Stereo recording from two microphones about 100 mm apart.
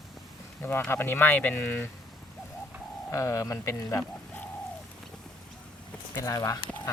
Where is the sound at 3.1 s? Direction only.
30° left (ahead or behind).